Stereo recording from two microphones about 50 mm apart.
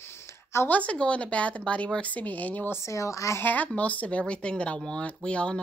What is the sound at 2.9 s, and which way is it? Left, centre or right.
Speech, left.